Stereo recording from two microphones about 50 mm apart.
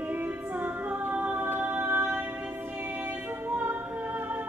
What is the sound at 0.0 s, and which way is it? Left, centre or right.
Music, right.